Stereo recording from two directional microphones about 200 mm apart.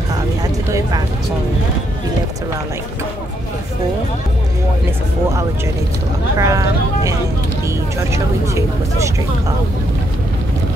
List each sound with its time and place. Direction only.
0.1 s music: 20° right (ahead or behind)
6.3 s vehicle: 15° right (ahead or behind)
8.1 s speech: 15° right (ahead or behind)